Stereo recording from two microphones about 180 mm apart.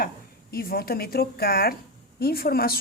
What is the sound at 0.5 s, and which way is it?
A woman's voice, 55° left (ahead or behind).